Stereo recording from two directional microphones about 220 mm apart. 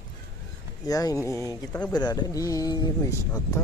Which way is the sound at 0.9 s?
15° left (ahead or behind).